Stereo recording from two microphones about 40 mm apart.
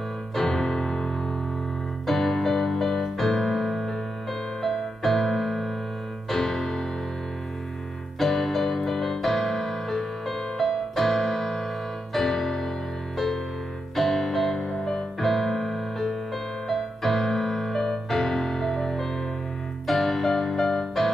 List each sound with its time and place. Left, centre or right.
0.5 s keyboard: centre
2.0 s music: centre
8.2 s music: centre
13.9 s music: centre